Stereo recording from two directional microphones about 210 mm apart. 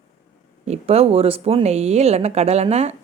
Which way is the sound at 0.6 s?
30° right (ahead or behind).